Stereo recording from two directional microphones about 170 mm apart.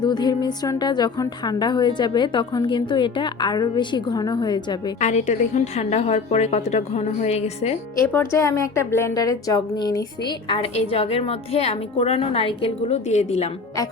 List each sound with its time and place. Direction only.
0.0 s a woman's voice: 25° left (ahead or behind)
4.9 s a woman's voice: 45° left (ahead or behind)
8.1 s a woman's voice: 15° left (ahead or behind); by 13.5 s 40° left (ahead or behind)